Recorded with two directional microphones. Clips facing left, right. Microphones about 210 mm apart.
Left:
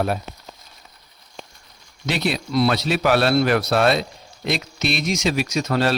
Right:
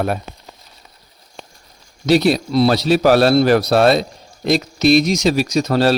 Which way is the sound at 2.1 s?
40° right (ahead or behind).